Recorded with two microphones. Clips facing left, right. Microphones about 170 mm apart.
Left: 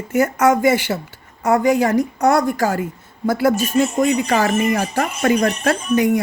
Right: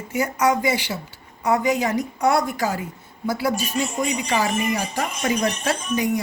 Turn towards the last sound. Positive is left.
turn(degrees=55)  # may be behind; listen again after turning